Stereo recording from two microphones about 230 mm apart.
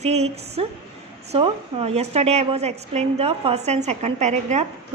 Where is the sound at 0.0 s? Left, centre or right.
Right.